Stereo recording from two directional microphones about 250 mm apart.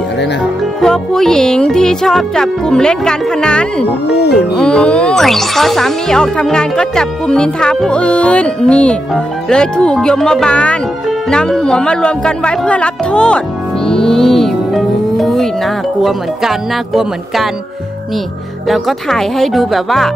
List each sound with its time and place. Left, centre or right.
0.7 s speech: centre
4.1 s speech: left
4.6 s speech: centre
13.8 s music: centre
16.0 s speech: centre
18.7 s speech: centre